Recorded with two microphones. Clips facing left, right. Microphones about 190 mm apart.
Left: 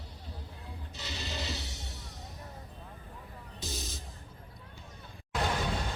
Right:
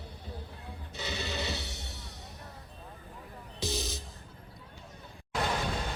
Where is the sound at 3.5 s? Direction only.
85° right.